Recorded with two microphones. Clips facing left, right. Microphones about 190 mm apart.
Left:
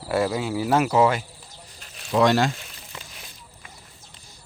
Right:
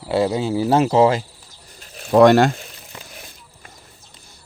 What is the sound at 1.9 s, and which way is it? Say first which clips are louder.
Speech: right 8 dB; 50° right (ahead or behind).